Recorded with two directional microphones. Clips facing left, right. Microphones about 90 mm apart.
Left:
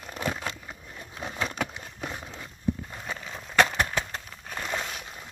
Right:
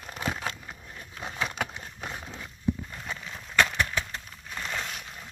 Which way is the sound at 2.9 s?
20° left (ahead or behind).